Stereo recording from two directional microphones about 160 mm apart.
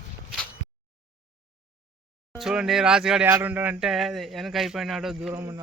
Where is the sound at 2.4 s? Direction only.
5° right (ahead or behind).